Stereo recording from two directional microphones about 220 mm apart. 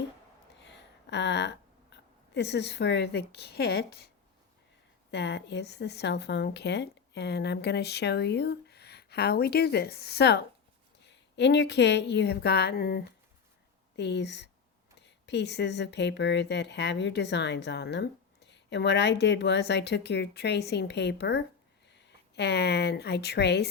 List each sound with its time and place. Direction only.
0.6 s speech: 50° left (ahead or behind)
5.1 s speech: 50° left (ahead or behind)